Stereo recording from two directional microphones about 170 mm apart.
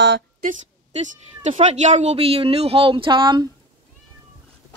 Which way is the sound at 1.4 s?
45° right (ahead or behind).